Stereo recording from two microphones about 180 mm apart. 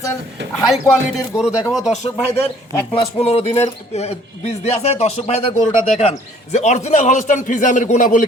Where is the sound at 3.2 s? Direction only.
35° left (ahead or behind).